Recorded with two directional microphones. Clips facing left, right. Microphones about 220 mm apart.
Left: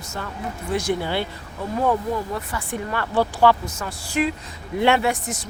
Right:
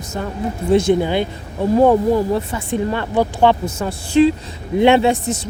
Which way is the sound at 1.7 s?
30° right (ahead or behind).